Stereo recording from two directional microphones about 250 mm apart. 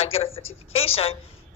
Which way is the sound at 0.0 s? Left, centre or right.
Left.